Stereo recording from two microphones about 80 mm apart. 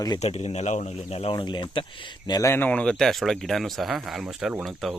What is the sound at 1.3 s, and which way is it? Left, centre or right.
Speech, left.